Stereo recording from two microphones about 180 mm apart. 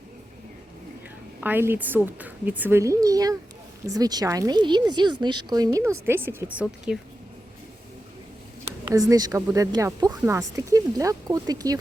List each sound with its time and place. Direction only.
1.4 s a woman's voice: 10° right (ahead or behind)
8.8 s a woman's voice: 20° right (ahead or behind)